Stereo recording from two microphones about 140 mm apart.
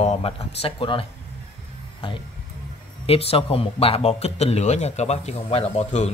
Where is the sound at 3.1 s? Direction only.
45° left (ahead or behind).